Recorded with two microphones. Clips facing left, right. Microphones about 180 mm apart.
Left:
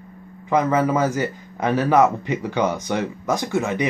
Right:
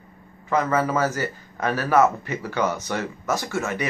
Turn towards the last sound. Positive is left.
turn(degrees=15)  # may be behind; listen again after turning